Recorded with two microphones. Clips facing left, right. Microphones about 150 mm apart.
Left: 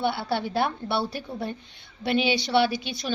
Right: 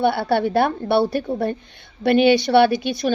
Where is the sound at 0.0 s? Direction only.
55° right (ahead or behind).